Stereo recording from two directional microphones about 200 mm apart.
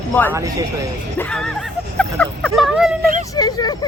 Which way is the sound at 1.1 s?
5° left (ahead or behind).